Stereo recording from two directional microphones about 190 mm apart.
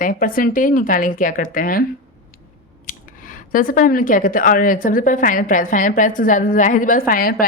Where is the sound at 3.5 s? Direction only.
45° left (ahead or behind).